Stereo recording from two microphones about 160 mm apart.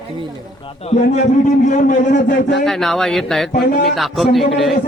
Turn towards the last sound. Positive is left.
turn(degrees=0)  # may be behind; listen again after turning